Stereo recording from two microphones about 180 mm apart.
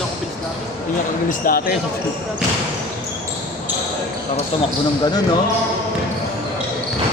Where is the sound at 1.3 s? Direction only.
55° left (ahead or behind).